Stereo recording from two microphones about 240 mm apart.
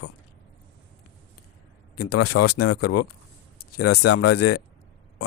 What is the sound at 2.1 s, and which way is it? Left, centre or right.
Speech, left.